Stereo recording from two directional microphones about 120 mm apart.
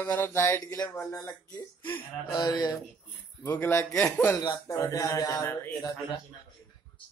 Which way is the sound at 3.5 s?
20° left (ahead or behind).